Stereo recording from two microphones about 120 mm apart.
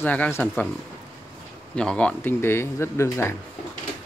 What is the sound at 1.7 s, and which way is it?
Speech, 5° left (ahead or behind).